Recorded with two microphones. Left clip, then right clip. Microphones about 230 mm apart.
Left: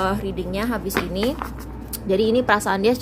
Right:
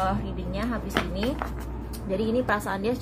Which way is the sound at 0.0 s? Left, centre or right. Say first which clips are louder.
Left 5 dB; left.